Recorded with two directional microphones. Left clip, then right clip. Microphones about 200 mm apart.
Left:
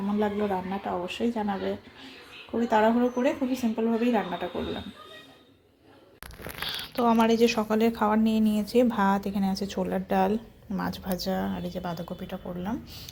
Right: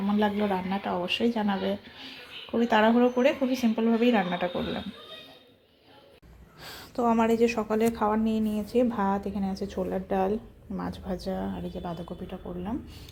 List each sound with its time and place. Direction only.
0.1 s speech: centre (ahead or behind)
6.7 s speech: 10° right (ahead or behind)